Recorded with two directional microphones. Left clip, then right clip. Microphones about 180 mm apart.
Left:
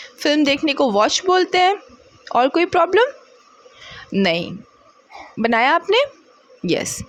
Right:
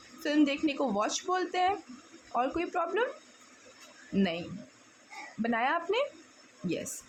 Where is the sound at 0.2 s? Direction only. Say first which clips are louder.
Left 11 dB; 45° left (ahead or behind).